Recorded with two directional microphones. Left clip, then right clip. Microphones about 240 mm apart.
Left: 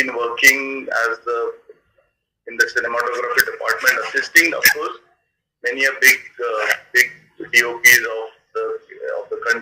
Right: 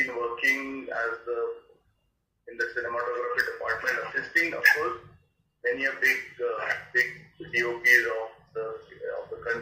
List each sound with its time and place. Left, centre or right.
0.0 s speech: left
2.6 s speech: left
7.5 s a sound: left